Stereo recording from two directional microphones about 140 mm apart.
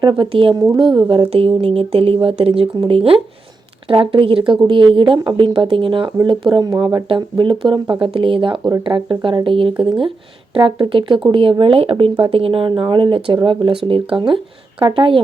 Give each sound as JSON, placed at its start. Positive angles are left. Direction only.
{"t": 0.0, "sound": "speech", "side_deg": -35}
{"t": 0.6, "sound": "a woman's voice", "side_deg": -20}
{"t": 0.9, "sound": "speech", "side_deg": -35}